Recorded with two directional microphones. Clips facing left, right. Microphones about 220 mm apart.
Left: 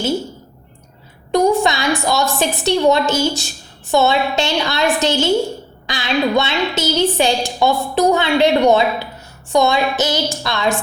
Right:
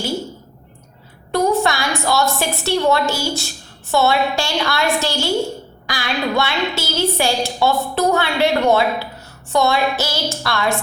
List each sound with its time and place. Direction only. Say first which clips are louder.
1.3 s a woman's voice: left 3 dB; 15° left (ahead or behind)